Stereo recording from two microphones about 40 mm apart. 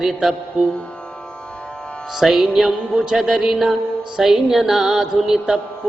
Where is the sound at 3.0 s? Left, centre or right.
Centre.